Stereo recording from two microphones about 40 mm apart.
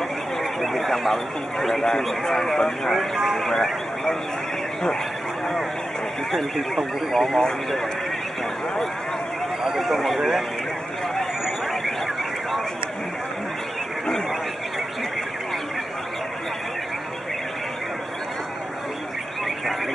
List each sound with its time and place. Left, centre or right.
0.4 s speech: centre
6.3 s speech: centre
9.6 s speech: centre
11.4 s a sound: centre